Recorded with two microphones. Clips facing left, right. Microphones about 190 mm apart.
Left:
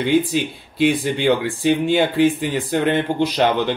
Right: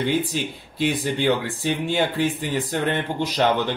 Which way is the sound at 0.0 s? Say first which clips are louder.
Left 5 dB; 15° left (ahead or behind).